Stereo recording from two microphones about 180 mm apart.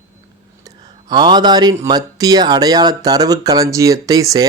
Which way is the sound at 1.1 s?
25° right (ahead or behind).